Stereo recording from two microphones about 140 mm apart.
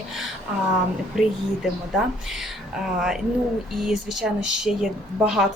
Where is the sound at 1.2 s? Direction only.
5° right (ahead or behind).